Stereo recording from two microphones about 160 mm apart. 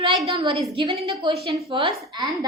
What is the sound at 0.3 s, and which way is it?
A woman's voice, 35° right (ahead or behind).